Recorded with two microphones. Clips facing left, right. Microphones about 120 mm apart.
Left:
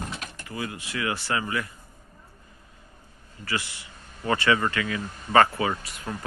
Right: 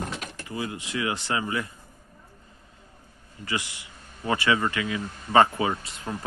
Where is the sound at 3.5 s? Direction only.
15° right (ahead or behind).